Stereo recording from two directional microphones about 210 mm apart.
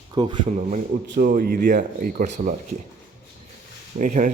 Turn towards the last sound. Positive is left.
turn(degrees=-40)  # may be behind; listen again after turning